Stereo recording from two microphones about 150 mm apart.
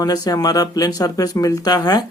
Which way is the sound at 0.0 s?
25° left (ahead or behind).